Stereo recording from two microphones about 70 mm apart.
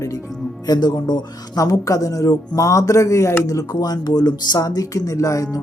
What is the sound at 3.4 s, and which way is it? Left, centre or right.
Music, left.